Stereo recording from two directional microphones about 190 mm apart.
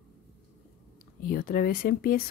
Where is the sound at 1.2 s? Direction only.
50° left (ahead or behind).